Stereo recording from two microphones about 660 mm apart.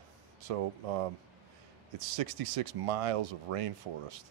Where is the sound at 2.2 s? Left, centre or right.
Right.